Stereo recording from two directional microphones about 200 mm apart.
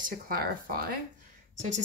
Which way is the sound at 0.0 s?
45° right (ahead or behind).